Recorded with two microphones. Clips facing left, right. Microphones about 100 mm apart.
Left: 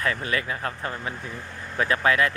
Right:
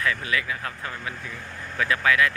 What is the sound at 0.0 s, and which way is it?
Speech, 35° left (ahead or behind).